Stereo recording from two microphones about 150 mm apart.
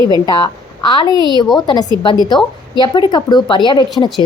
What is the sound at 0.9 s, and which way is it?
A woman's voice, 30° left (ahead or behind).